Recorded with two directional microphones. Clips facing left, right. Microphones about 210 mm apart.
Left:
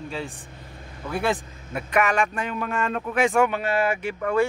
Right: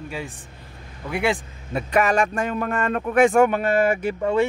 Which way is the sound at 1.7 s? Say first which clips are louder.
Right 3 dB; 30° right (ahead or behind).